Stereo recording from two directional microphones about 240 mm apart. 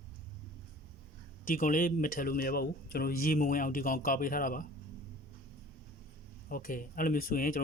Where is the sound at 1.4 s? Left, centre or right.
Left.